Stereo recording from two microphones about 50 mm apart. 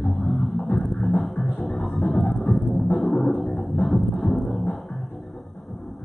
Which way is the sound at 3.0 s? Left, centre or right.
Centre.